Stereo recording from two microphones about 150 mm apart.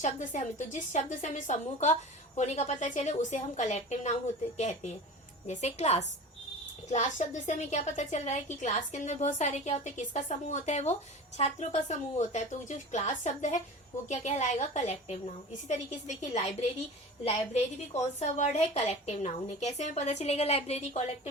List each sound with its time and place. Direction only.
0.0 s a woman's voice: 50° left (ahead or behind)